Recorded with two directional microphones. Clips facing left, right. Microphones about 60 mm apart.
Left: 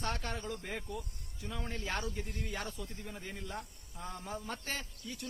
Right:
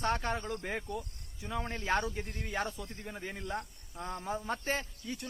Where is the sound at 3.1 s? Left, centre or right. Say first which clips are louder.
Right 6 dB; centre.